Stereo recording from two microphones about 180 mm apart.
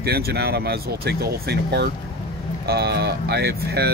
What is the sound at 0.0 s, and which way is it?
Speech, 60° right (ahead or behind).